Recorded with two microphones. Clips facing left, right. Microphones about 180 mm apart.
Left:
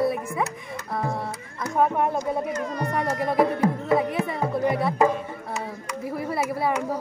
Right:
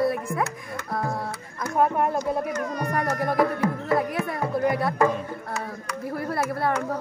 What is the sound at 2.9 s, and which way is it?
Speech, centre (ahead or behind).